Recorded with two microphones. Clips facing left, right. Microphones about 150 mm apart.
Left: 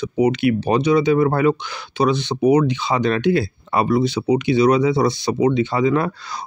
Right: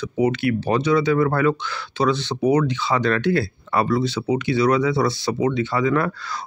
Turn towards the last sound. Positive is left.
turn(degrees=20)  # may be behind; listen again after turning